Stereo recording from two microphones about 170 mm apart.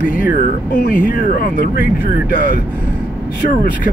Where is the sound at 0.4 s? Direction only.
50° left (ahead or behind).